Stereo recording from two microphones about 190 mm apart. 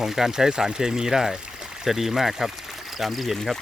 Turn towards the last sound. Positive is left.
turn(degrees=0)  # may be behind; listen again after turning